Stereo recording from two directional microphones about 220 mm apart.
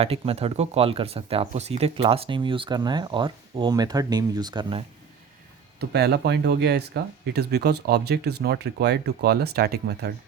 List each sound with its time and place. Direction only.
0.0 s speech: 25° right (ahead or behind)
5.8 s speech: 50° right (ahead or behind)